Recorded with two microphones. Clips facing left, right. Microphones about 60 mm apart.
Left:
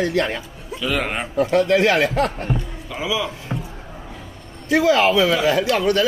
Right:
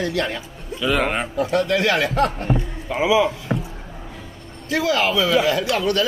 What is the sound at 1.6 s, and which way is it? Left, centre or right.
Speech, left.